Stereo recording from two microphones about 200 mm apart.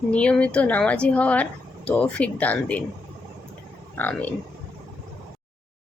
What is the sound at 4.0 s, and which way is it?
Speech, 10° left (ahead or behind).